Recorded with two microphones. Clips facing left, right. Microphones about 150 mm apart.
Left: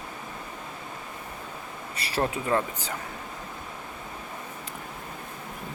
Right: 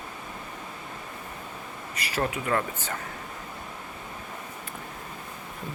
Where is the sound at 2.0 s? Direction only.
30° left (ahead or behind).